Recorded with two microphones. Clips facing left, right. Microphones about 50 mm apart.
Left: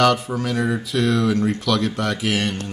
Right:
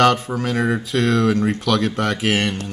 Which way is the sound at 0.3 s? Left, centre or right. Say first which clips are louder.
Right 2 dB; right.